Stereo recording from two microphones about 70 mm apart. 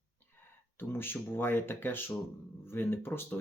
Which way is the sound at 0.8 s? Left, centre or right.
Left.